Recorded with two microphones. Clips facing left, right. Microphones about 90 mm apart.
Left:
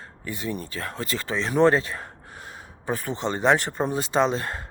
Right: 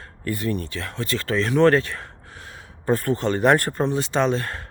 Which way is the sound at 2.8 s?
10° left (ahead or behind).